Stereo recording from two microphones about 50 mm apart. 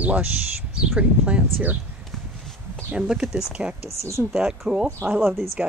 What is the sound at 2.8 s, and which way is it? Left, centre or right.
Speech, centre.